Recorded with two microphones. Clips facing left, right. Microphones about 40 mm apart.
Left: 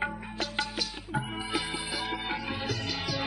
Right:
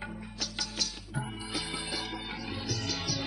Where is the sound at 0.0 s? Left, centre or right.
Left.